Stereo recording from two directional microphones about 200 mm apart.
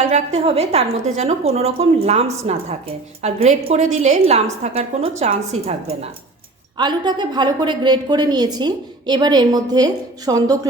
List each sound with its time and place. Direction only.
0.1 s a woman's voice: 30° right (ahead or behind)
6.7 s a woman's voice: 20° right (ahead or behind)